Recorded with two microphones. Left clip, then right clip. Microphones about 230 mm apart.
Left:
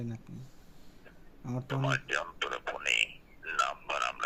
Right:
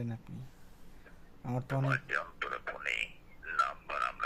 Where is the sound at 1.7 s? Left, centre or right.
Centre.